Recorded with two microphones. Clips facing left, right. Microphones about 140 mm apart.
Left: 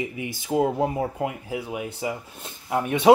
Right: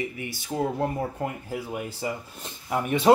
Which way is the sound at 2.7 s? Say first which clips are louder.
Left 1 dB; 20° left (ahead or behind).